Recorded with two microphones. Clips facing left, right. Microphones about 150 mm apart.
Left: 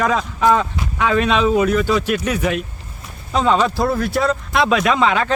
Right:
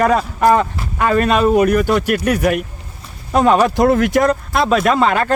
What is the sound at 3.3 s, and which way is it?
Speech, 60° right (ahead or behind).